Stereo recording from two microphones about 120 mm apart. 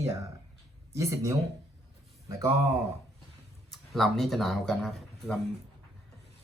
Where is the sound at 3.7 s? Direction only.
Centre (ahead or behind).